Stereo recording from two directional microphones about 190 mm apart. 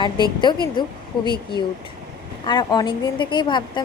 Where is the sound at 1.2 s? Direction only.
25° left (ahead or behind).